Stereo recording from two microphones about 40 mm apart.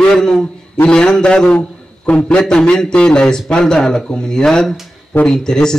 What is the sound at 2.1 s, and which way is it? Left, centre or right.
A man's voice, left.